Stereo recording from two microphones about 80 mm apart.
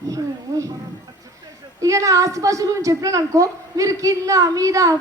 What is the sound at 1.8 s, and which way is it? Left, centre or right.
A woman's voice, right.